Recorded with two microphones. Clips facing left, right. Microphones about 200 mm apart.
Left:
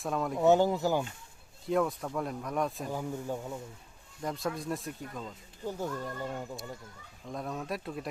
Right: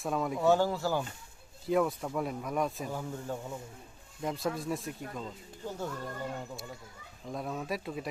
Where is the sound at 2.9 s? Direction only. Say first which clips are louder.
Left 2 dB; 15° left (ahead or behind).